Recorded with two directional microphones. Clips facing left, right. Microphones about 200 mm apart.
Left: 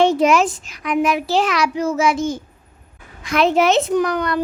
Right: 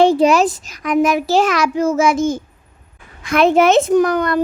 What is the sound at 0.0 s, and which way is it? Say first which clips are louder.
A child's voice: right 3 dB; 35° right (ahead or behind).